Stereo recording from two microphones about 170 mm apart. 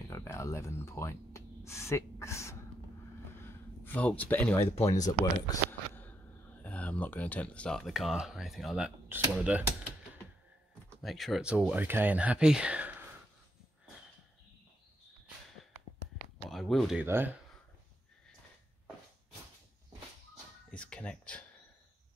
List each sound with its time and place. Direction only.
0.1 s speech: 15° left (ahead or behind)
3.4 s a sound: 10° left (ahead or behind)
4.6 s speech: 35° left (ahead or behind)
5.2 s a sound: 15° left (ahead or behind)
6.6 s speech: 10° left (ahead or behind); by 9.7 s 10° right (ahead or behind)
11.0 s speech: centre (ahead or behind)
16.4 s a sound: centre (ahead or behind)
17.0 s speech: 10° right (ahead or behind)
20.7 s speech: 5° left (ahead or behind)